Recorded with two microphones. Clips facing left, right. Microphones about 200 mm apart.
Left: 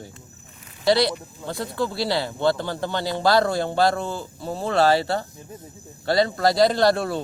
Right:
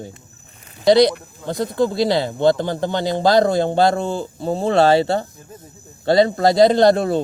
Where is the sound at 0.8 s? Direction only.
20° right (ahead or behind).